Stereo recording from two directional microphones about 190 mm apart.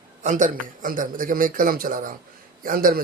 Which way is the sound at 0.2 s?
40° right (ahead or behind).